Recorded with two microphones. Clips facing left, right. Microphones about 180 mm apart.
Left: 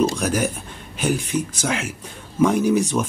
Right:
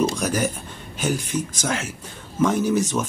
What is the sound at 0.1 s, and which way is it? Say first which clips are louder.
Speech: left 1 dB; 10° left (ahead or behind).